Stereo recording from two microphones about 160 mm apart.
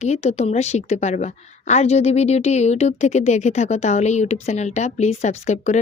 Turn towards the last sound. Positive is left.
turn(degrees=45)  # may be behind; listen again after turning